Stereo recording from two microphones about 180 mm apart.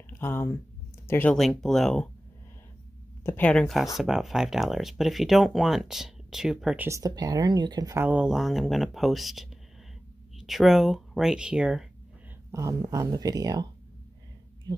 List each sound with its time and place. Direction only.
0.1 s speech: 10° left (ahead or behind)
3.3 s speech: 10° left (ahead or behind)
6.9 s speech: 20° right (ahead or behind); by 11.9 s 5° right (ahead or behind)
12.4 s speech: 20° right (ahead or behind)